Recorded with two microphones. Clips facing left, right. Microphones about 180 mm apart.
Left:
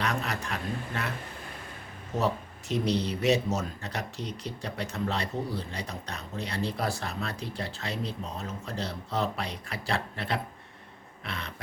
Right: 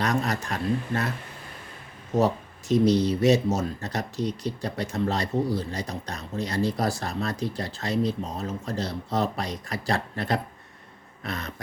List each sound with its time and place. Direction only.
0.0 s a man's voice: 40° right (ahead or behind)
2.1 s speech: 40° right (ahead or behind)
11.3 s a sound: 40° right (ahead or behind)